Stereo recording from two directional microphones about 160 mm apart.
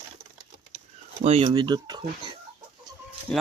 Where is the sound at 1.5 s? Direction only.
25° right (ahead or behind).